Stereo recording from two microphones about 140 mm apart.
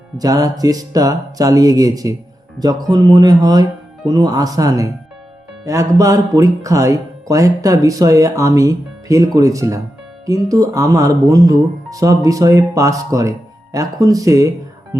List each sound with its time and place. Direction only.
0.2 s speech: 25° right (ahead or behind)